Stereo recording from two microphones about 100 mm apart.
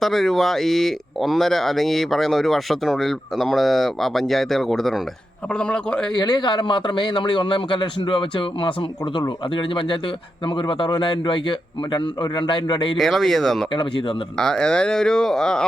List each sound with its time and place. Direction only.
0.0 s speech: centre (ahead or behind)
6.1 s a man's voice: 45° left (ahead or behind)
13.0 s speech: centre (ahead or behind)